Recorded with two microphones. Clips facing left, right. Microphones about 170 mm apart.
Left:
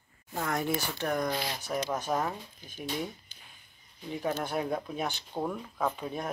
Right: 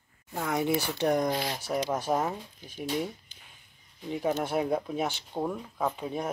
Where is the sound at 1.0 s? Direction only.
20° right (ahead or behind).